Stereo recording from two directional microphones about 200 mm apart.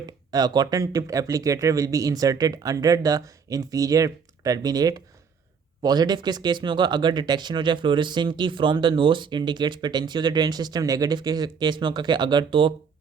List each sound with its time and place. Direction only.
0.0 s speech: 20° right (ahead or behind)